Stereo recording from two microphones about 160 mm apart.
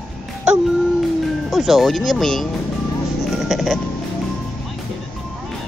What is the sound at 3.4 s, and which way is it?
Music, centre (ahead or behind).